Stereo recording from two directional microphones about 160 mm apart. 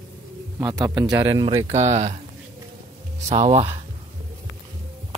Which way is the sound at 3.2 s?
45° right (ahead or behind).